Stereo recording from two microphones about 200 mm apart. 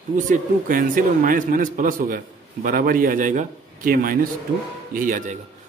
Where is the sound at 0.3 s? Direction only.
40° right (ahead or behind).